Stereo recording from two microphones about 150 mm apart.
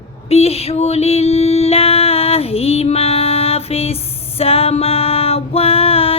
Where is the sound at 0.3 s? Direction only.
40° left (ahead or behind).